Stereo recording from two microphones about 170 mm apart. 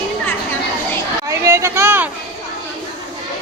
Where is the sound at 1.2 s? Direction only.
15° right (ahead or behind).